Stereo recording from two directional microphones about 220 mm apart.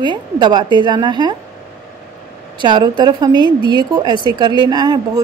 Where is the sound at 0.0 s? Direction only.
20° right (ahead or behind).